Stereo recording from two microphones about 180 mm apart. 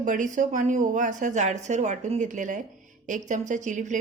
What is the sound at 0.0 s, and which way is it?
Speech, 45° right (ahead or behind).